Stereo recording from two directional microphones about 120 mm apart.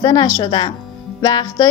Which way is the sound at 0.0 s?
35° left (ahead or behind).